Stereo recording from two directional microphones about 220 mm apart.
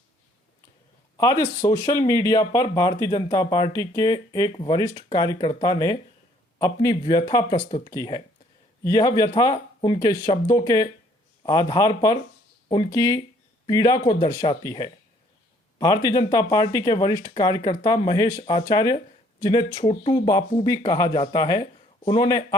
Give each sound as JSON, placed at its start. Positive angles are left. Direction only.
{"t": 1.1, "sound": "speech", "side_deg": 15}
{"t": 16.0, "sound": "speech", "side_deg": 15}